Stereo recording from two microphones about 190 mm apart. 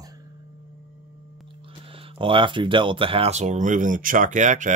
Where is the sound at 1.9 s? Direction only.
30° right (ahead or behind).